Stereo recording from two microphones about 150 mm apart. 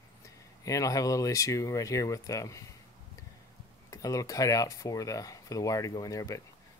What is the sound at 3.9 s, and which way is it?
Speech, 20° left (ahead or behind).